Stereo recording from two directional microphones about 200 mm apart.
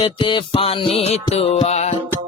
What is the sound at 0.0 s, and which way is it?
Music, 25° left (ahead or behind).